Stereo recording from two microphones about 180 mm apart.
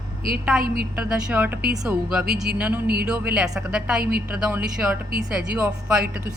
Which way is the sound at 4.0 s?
60° right (ahead or behind).